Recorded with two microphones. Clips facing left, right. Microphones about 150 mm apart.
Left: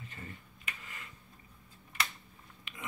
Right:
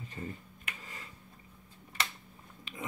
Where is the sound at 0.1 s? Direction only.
30° right (ahead or behind).